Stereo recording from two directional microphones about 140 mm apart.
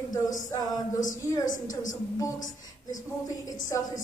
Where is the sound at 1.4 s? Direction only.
65° left (ahead or behind).